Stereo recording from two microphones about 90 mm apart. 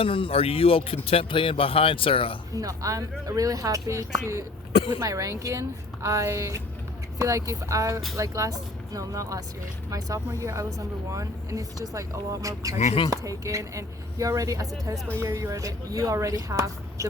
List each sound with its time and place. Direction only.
0.0 s speech: 85° left
2.6 s speech: 40° right (ahead or behind)
10.4 s speech: 35° right (ahead or behind)